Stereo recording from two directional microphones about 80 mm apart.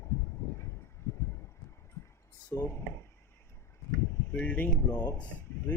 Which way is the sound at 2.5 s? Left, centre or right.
Left.